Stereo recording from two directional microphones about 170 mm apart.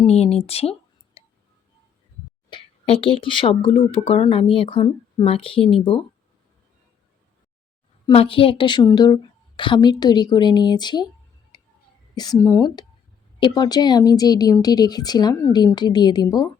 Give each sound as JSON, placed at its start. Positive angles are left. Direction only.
{"t": 0.0, "sound": "speech", "side_deg": 35}
{"t": 2.5, "sound": "speech", "side_deg": 30}
{"t": 8.1, "sound": "speech", "side_deg": 35}
{"t": 12.1, "sound": "speech", "side_deg": 25}